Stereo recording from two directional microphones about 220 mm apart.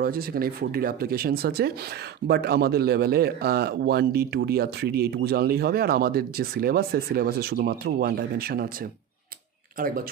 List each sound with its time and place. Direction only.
0.0 s speech: 40° right (ahead or behind)
9.8 s speech: 40° right (ahead or behind)